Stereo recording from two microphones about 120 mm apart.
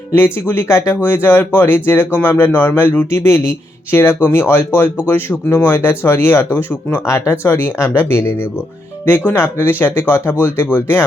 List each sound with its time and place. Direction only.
0.1 s speech: 20° left (ahead or behind)